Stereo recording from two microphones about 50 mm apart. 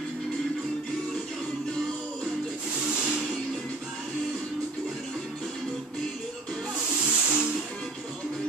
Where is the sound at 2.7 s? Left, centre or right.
Right.